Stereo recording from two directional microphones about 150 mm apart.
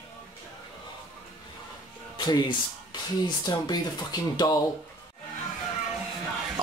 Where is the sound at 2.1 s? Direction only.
30° left (ahead or behind).